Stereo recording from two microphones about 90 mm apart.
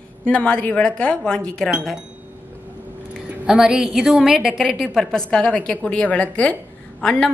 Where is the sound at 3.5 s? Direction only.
10° right (ahead or behind).